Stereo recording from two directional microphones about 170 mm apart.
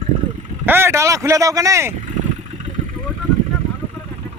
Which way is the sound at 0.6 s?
15° right (ahead or behind).